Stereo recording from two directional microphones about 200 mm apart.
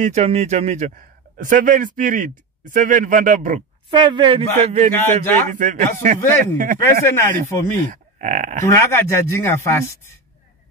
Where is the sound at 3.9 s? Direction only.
25° right (ahead or behind).